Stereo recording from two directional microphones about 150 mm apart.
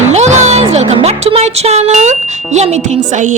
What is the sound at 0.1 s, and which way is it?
Music, 50° right (ahead or behind).